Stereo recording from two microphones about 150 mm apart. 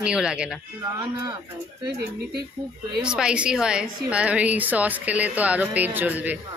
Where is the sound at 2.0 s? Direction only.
90° right.